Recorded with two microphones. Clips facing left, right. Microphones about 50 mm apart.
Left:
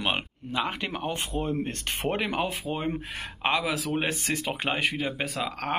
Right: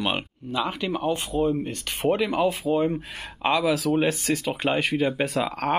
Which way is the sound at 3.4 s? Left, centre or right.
Left.